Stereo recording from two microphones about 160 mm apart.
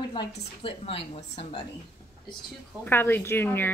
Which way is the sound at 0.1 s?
30° left (ahead or behind).